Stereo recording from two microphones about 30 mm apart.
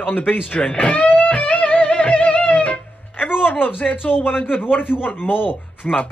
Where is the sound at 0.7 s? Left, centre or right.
Left.